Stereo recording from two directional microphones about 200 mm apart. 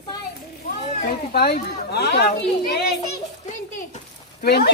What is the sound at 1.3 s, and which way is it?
A woman's voice, 55° left (ahead or behind).